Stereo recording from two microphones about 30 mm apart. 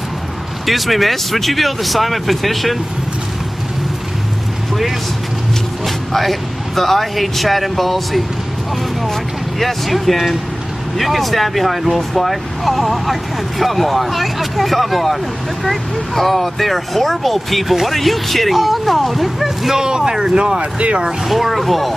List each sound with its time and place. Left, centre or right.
0.7 s speech: centre
5.9 s speech: centre
9.6 s speech: centre
16.2 s speech: centre
20.0 s speech: centre
20.3 s speech: right
21.3 s speech: centre